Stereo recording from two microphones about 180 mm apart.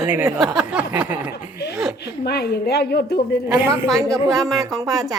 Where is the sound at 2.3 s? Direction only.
60° left (ahead or behind).